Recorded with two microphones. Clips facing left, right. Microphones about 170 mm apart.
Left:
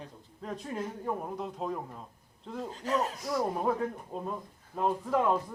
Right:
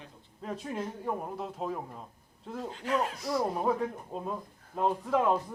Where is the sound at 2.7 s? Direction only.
40° left (ahead or behind).